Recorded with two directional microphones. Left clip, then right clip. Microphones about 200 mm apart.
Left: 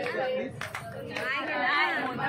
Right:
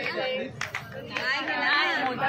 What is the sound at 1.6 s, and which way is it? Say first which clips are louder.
Chatter: right 2 dB; 50° right (ahead or behind).